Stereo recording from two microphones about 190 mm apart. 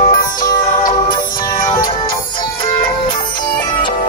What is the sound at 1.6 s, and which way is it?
Music, 20° left (ahead or behind).